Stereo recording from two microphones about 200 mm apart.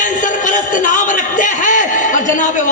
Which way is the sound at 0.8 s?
40° left (ahead or behind).